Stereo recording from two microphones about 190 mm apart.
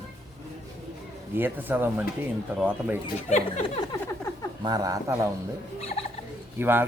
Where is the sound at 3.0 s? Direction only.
35° left (ahead or behind).